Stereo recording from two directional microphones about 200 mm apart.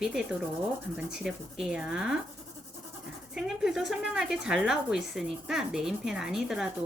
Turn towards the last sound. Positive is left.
turn(degrees=0)  # may be behind; listen again after turning